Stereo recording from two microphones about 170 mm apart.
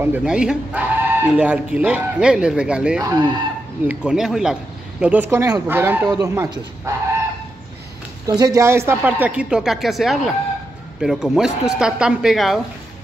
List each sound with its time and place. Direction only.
0.0 s speech: 5° right (ahead or behind)
3.0 s speech: 25° right (ahead or behind)
3.8 s speech: 5° right (ahead or behind)
8.3 s speech: 20° right (ahead or behind); by 12.5 s centre (ahead or behind)